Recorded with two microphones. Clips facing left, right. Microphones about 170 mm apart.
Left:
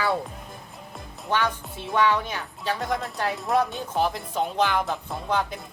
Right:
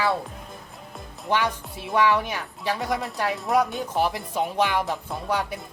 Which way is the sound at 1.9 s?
10° right (ahead or behind).